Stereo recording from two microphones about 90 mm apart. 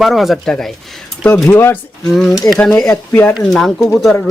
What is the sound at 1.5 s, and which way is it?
Speech, 25° left (ahead or behind).